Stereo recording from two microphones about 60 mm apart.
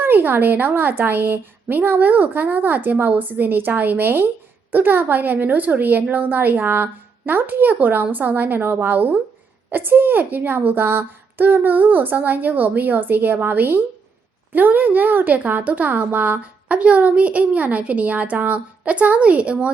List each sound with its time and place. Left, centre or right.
0.0 s a woman's voice: right; by 19.7 s centre